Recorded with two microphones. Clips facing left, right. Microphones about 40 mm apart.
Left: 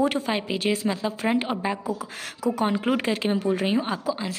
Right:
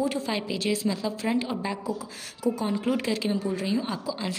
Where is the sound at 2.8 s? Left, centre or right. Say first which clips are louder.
Left 3 dB; left.